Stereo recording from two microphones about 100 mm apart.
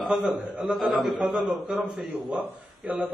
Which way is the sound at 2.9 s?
15° right (ahead or behind).